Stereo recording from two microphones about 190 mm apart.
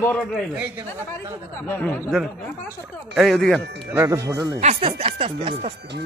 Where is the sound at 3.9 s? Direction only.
15° right (ahead or behind).